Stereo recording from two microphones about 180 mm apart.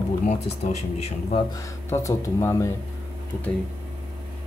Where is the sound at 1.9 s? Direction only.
15° left (ahead or behind).